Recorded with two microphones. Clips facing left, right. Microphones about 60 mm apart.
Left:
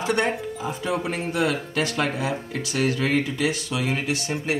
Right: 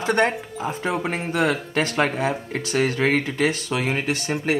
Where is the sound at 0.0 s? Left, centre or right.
Right.